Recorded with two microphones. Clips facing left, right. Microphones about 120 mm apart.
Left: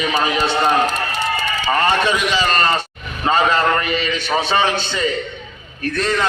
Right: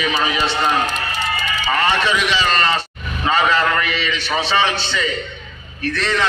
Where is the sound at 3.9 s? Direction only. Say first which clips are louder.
Left 2 dB; 45° left (ahead or behind).